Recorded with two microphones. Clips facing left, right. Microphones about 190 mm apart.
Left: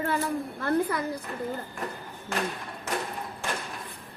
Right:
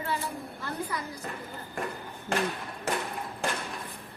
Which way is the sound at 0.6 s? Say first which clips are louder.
Left 9 dB; 60° left (ahead or behind).